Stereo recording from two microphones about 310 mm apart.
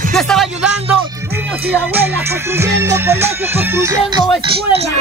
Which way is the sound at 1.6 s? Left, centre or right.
Centre.